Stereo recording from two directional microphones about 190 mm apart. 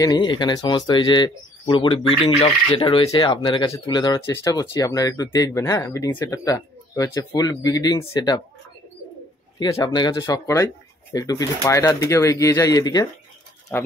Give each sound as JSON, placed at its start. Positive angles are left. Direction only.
{"t": 0.0, "sound": "speech", "side_deg": 20}
{"t": 9.6, "sound": "speech", "side_deg": 20}